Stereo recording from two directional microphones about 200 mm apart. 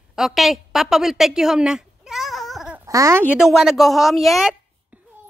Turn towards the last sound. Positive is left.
turn(degrees=0)  # may be behind; listen again after turning